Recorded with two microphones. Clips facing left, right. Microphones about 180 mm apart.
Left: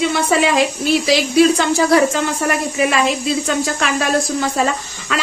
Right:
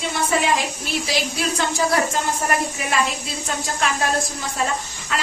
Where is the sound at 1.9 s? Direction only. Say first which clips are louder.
Left 7 dB; 90° left.